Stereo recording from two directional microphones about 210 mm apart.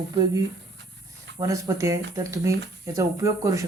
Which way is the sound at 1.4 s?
15° right (ahead or behind).